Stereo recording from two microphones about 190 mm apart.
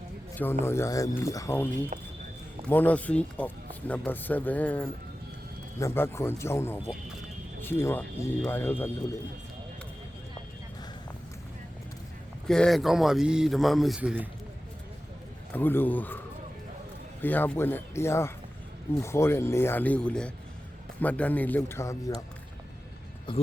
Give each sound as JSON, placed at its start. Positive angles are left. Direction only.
{"t": 0.6, "sound": "speech", "side_deg": 15}
{"t": 12.5, "sound": "a man's voice", "side_deg": 5}
{"t": 15.5, "sound": "speech", "side_deg": 10}
{"t": 23.3, "sound": "speech", "side_deg": 25}